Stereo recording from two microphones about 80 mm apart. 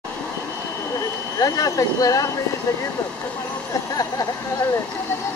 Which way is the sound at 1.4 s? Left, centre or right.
Left.